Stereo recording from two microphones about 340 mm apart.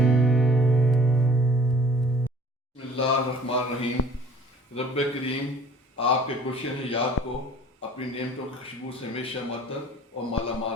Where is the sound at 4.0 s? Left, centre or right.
Left.